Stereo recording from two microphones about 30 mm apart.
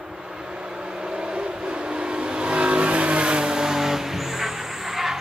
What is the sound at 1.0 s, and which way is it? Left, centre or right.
Vehicle, right.